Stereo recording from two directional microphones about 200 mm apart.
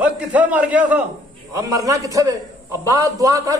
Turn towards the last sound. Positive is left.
turn(degrees=-15)  # may be behind; listen again after turning